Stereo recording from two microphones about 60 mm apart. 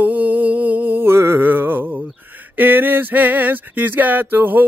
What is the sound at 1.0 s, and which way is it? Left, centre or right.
Music, right.